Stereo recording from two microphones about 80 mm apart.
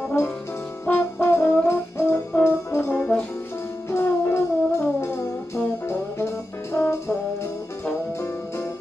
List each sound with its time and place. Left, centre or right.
0.8 s brass instrument: left
3.9 s music: left